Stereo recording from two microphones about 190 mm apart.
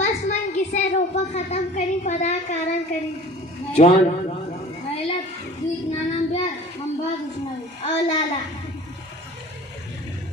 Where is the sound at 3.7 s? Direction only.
35° left (ahead or behind).